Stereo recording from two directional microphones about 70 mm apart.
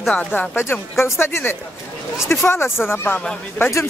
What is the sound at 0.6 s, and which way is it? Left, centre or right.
Speech, left.